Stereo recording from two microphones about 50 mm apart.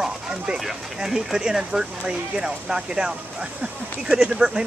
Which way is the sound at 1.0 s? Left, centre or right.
Centre.